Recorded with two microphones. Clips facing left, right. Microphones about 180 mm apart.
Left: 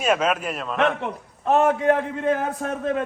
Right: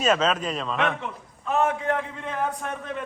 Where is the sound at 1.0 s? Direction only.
70° left (ahead or behind).